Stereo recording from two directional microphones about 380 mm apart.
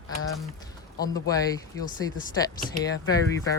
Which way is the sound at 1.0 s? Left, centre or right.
Centre.